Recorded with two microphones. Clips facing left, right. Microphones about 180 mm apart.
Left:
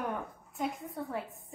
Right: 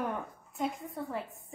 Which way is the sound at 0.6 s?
Centre (ahead or behind).